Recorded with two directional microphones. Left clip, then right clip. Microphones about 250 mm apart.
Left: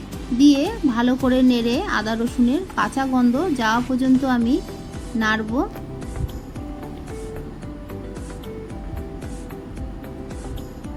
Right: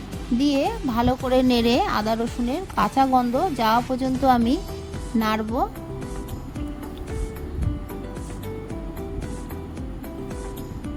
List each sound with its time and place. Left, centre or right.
0.3 s a woman's voice: right